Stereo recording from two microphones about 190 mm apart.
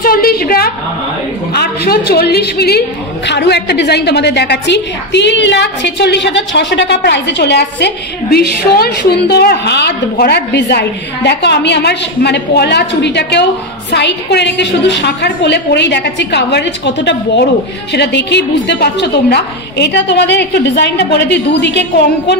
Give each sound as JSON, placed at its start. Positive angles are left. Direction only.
{"t": 0.0, "sound": "a woman's voice", "side_deg": 50}